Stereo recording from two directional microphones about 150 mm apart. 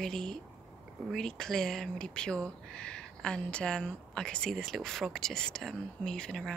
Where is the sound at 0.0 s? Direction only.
5° left (ahead or behind).